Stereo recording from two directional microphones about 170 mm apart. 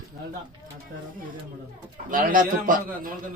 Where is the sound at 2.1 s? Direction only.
55° right (ahead or behind).